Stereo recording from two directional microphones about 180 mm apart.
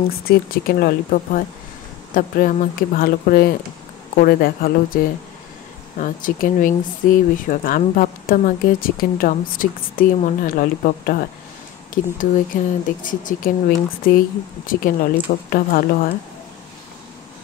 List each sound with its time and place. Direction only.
0.3 s speech: 55° left (ahead or behind)